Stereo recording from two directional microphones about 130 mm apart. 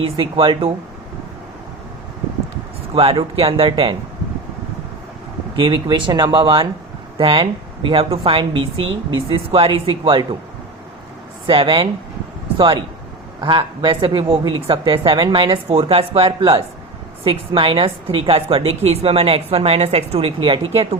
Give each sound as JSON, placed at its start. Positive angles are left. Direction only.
{"t": 0.0, "sound": "a woman's voice", "side_deg": -45}
{"t": 2.9, "sound": "a woman's voice", "side_deg": -45}
{"t": 5.5, "sound": "a woman's voice", "side_deg": -40}
{"t": 11.4, "sound": "a woman's voice", "side_deg": -45}